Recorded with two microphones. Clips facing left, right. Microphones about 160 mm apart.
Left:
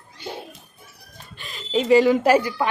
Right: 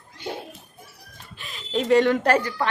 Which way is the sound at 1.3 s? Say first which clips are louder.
Left 3 dB; centre (ahead or behind).